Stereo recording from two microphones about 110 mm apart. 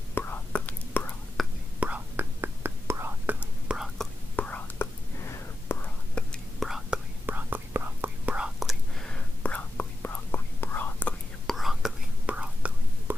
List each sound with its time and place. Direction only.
0.1 s whispering: 15° left (ahead or behind)
1.4 s whispering: centre (ahead or behind)
1.8 s whispering: 15° right (ahead or behind)
3.3 s whispering: 5° right (ahead or behind)
4.4 s whispering: 15° left (ahead or behind)
6.1 s whispering: 10° left (ahead or behind)
6.9 s whispering: 10° right (ahead or behind); by 11.1 s 15° left (ahead or behind)
11.4 s whispering: centre (ahead or behind)